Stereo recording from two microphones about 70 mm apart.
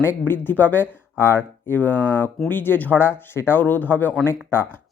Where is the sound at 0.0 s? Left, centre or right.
Left.